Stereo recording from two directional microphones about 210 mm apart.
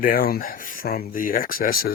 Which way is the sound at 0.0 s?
45° left (ahead or behind).